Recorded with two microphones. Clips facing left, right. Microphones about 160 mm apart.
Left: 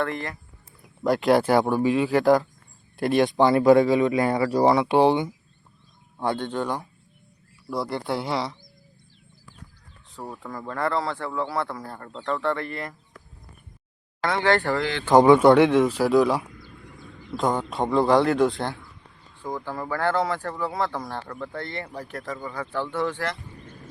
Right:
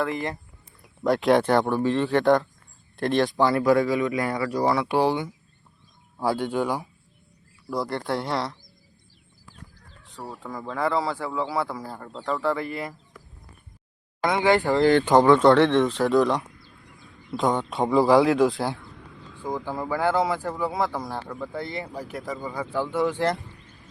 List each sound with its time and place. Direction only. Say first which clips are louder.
1.0 s speech: even; centre (ahead or behind)
3.2 s speech: left 6 dB; 20° left (ahead or behind)
6.1 s speech: right 2 dB; 5° right (ahead or behind)
10.4 s speech: right 1 dB; centre (ahead or behind)
14.2 s speech: right 1 dB; 15° right (ahead or behind)
14.8 s speech: right 9 dB; 50° right (ahead or behind)
15.2 s speech: left 2 dB; 15° left (ahead or behind)
15.4 s speech: left 1 dB; centre (ahead or behind)
18.9 s a sound: right 8 dB; 90° right
19.4 s speech: right 2 dB; 15° right (ahead or behind)
23.6 s clip-clop: left 7 dB; 45° left (ahead or behind)